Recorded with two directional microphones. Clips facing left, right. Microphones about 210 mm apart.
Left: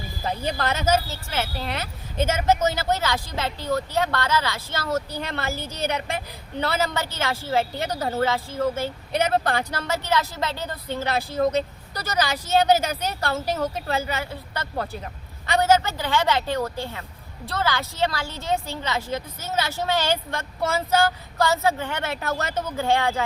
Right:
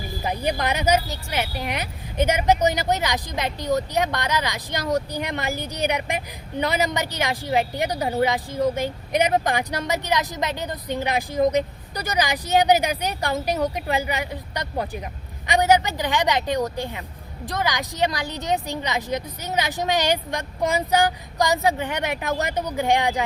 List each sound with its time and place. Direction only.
0.2 s speech: 15° right (ahead or behind)